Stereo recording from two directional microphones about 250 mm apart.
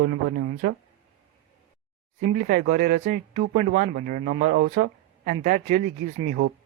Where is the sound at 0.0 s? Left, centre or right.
Right.